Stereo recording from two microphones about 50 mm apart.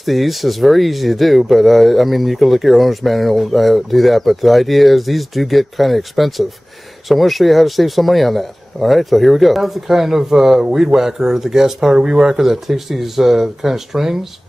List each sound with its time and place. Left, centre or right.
0.0 s speech: centre